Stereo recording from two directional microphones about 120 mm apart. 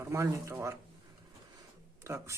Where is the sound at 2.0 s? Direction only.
25° right (ahead or behind).